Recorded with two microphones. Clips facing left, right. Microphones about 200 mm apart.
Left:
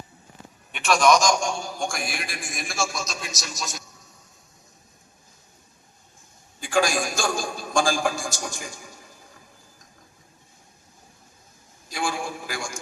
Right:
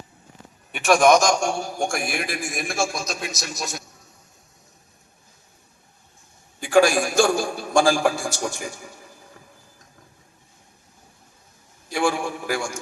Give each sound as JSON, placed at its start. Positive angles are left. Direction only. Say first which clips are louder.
{"t": 0.9, "sound": "a man's voice", "louder": "right 3 dB", "side_deg": -55}
{"t": 6.7, "sound": "a man's voice", "louder": "right 7 dB", "side_deg": -65}
{"t": 11.9, "sound": "a sound", "louder": "right 6 dB", "side_deg": -65}